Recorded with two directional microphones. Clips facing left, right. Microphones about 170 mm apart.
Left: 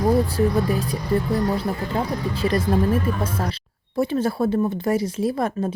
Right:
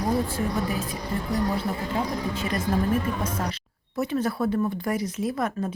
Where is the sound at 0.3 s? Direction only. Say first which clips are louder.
Left 6 dB; 35° left (ahead or behind).